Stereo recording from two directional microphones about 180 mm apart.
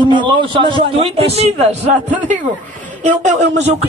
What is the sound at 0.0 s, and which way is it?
Speech, 25° right (ahead or behind).